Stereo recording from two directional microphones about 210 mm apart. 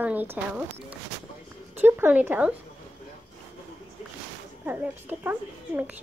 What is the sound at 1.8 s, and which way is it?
Speech, 10° right (ahead or behind).